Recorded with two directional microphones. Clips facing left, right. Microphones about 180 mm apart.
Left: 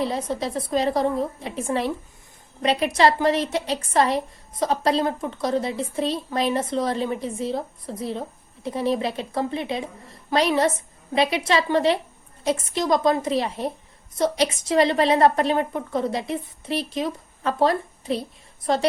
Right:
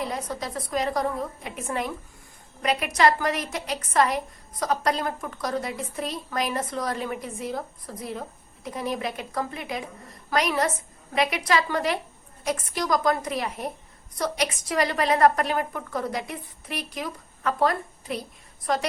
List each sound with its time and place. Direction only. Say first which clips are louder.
0.0 s a woman's voice: left 5 dB; 30° left (ahead or behind)